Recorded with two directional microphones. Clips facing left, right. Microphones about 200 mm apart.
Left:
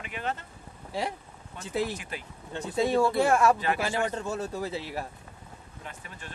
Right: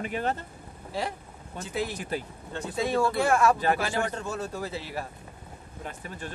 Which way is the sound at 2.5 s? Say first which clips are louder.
Left 2 dB; 25° left (ahead or behind).